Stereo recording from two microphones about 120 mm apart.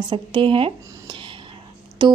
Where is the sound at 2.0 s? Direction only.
40° right (ahead or behind).